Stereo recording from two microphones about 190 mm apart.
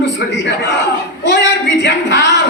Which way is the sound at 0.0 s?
65° left (ahead or behind).